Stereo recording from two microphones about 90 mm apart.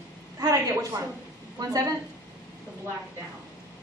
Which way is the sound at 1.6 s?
40° right (ahead or behind).